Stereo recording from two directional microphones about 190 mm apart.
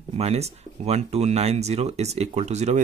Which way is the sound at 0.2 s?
35° right (ahead or behind).